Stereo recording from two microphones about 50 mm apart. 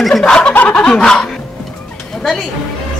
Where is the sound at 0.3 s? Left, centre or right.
Centre.